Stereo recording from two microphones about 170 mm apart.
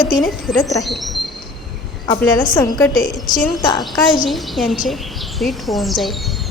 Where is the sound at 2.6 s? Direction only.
20° left (ahead or behind).